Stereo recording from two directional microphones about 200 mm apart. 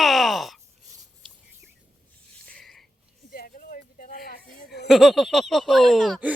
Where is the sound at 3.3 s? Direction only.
45° left (ahead or behind).